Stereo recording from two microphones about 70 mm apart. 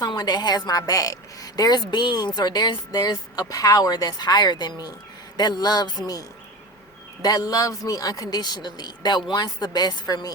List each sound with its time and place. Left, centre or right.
0.1 s a woman's voice: left
9.3 s a woman's voice: left